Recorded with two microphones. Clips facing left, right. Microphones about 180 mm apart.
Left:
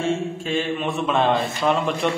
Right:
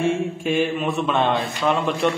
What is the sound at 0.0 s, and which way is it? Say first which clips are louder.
Speech: right 2 dB; 10° right (ahead or behind).